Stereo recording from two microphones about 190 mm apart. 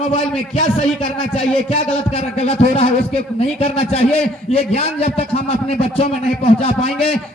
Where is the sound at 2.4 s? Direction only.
35° left (ahead or behind).